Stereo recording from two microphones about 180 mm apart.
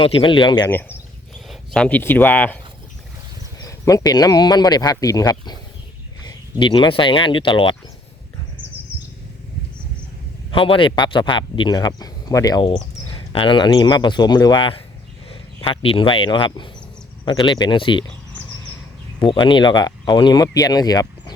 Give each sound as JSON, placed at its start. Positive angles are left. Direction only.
{"t": 0.0, "sound": "speech", "side_deg": 30}
{"t": 0.7, "sound": "speech", "side_deg": 10}
{"t": 3.6, "sound": "speech", "side_deg": 20}
{"t": 10.5, "sound": "speech", "side_deg": 30}
{"t": 19.2, "sound": "speech", "side_deg": 25}